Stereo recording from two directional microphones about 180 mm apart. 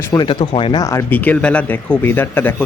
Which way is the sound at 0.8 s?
15° left (ahead or behind).